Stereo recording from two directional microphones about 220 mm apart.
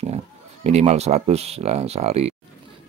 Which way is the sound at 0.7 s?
30° right (ahead or behind).